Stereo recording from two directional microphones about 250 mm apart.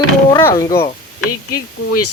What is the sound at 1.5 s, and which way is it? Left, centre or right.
Speech, left.